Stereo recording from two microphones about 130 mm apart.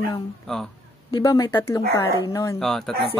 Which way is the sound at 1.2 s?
25° left (ahead or behind).